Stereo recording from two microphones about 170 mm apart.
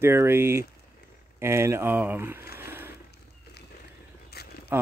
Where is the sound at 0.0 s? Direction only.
15° right (ahead or behind).